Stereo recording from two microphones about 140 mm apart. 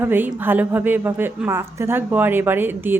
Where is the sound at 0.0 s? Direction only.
15° right (ahead or behind).